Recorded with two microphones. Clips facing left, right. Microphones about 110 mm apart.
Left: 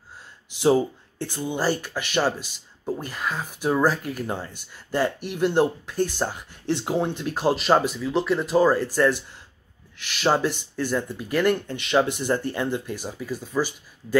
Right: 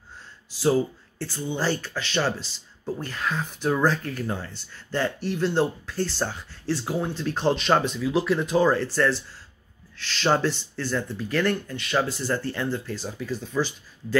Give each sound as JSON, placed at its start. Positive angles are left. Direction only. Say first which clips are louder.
{"t": 0.6, "sound": "speech", "louder": "left 2 dB", "side_deg": 20}
{"t": 7.2, "sound": "speech", "louder": "even", "side_deg": 10}